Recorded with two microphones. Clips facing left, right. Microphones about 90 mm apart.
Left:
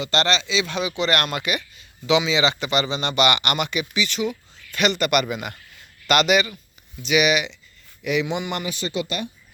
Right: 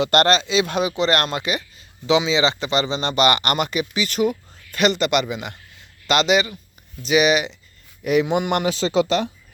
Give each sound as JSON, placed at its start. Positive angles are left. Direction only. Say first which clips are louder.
{"t": 0.0, "sound": "a man's voice", "louder": "right 5 dB", "side_deg": -55}